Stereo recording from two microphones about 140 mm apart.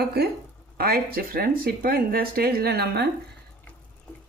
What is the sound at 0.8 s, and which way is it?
Speech, 90° right.